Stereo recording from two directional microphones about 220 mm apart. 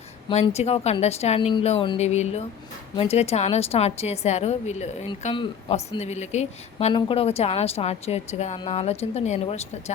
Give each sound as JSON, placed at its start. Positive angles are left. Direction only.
{"t": 0.3, "sound": "a woman's voice", "side_deg": 25}